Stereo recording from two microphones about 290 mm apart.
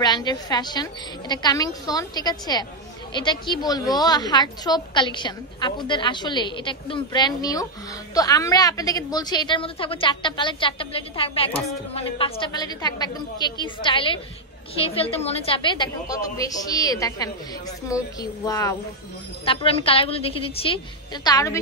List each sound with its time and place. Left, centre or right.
0.0 s a woman's voice: centre